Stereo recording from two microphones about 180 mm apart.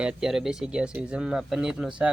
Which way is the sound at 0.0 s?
5° right (ahead or behind).